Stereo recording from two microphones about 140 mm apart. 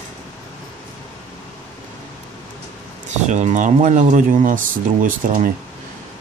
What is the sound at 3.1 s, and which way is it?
Speech, 55° right (ahead or behind).